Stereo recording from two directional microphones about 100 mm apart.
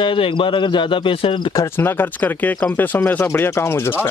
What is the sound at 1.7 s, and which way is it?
Speech, 20° left (ahead or behind).